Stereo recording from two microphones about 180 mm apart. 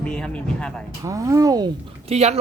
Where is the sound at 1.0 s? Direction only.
20° right (ahead or behind).